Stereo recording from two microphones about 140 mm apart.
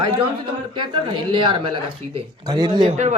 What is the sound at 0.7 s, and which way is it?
Speech, 35° right (ahead or behind).